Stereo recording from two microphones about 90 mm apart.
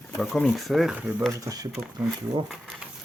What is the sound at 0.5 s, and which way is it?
Speech, centre (ahead or behind).